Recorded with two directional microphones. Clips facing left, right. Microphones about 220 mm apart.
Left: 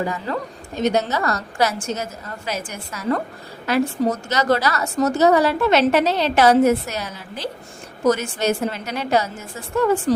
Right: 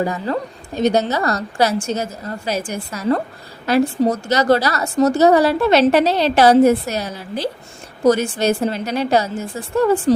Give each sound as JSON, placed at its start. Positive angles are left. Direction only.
{"t": 0.0, "sound": "a woman's voice", "side_deg": -35}